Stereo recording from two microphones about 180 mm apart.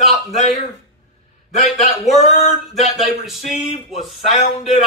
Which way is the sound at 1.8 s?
40° left (ahead or behind).